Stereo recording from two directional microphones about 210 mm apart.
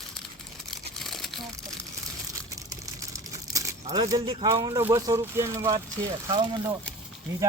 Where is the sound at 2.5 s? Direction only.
15° right (ahead or behind).